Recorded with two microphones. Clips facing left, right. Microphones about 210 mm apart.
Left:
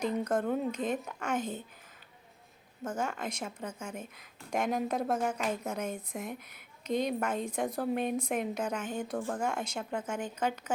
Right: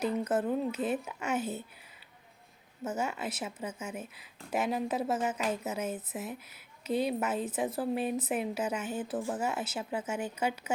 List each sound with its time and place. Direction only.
0.0 s a woman's voice: 5° right (ahead or behind)
2.8 s a woman's voice: 10° right (ahead or behind)